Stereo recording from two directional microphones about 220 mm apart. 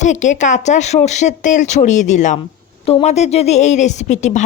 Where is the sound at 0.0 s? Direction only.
35° left (ahead or behind).